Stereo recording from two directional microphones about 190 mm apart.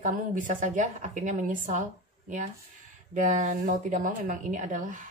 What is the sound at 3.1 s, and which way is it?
A woman's voice, 40° right (ahead or behind).